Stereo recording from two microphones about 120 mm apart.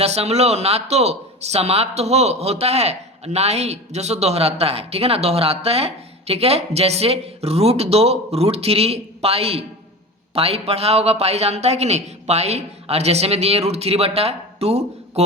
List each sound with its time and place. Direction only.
0.0 s speech: 60° right (ahead or behind)